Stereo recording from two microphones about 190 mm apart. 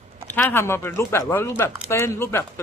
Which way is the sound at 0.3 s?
10° left (ahead or behind).